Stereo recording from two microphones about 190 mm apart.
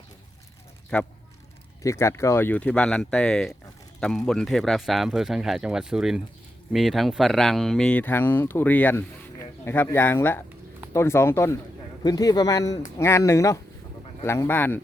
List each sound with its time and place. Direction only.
0.9 s speech: 5° left (ahead or behind)
1.8 s speech: 15° left (ahead or behind)